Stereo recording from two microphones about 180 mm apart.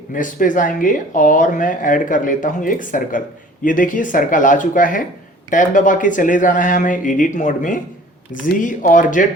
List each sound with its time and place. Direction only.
0.1 s speech: 45° left (ahead or behind)